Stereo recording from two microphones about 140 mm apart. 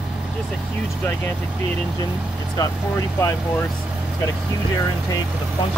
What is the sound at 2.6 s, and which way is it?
Speech, 25° left (ahead or behind).